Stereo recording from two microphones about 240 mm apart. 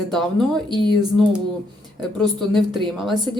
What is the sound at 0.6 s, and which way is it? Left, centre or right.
Speech, centre.